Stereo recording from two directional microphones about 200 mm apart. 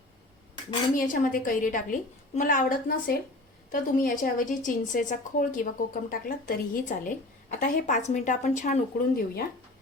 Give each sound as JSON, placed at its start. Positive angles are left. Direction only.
{"t": 0.9, "sound": "a woman's voice", "side_deg": 40}